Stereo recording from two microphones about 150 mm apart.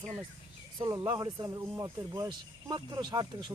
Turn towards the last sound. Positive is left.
turn(degrees=-30)  # may be behind; listen again after turning